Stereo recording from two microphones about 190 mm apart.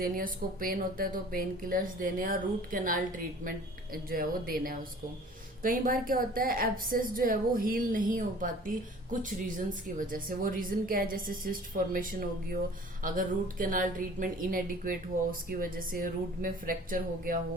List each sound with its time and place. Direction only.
0.0 s a woman's voice: 50° right (ahead or behind)